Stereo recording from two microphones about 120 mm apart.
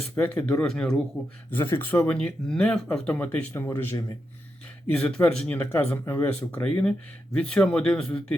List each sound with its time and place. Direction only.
0.2 s speech: 10° left (ahead or behind)
1.5 s speech: 20° left (ahead or behind)